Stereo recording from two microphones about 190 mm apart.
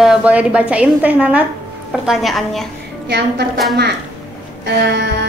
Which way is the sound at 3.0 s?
60° right (ahead or behind).